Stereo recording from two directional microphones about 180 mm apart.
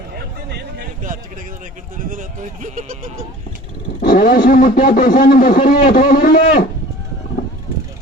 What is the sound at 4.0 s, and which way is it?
Speech, 55° left (ahead or behind).